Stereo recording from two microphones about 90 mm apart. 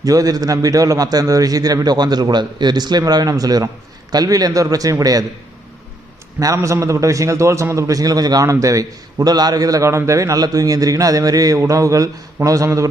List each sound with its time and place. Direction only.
0.0 s a man's voice: 40° right (ahead or behind)
6.4 s a man's voice: 35° right (ahead or behind)